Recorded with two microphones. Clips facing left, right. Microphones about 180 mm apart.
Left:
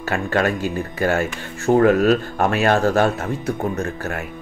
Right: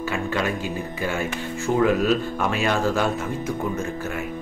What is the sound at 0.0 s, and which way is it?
Speech, 65° left (ahead or behind).